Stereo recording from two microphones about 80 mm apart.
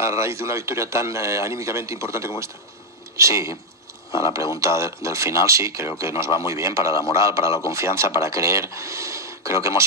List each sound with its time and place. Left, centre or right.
0.0 s a man's voice: right